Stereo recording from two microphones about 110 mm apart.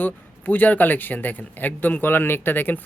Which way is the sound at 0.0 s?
15° left (ahead or behind).